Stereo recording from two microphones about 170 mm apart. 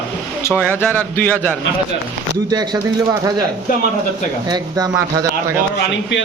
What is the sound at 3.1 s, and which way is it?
Speech, 25° right (ahead or behind).